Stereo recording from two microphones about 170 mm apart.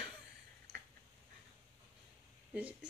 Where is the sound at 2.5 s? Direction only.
10° right (ahead or behind).